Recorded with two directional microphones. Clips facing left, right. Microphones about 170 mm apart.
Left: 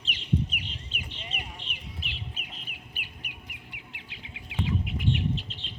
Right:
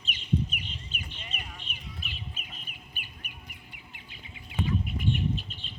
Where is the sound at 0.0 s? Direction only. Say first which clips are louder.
Left 1 dB; 85° left.